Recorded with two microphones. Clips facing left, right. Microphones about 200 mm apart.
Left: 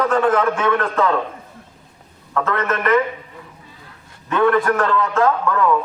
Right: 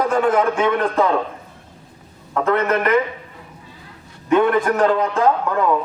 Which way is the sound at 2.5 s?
15° right (ahead or behind).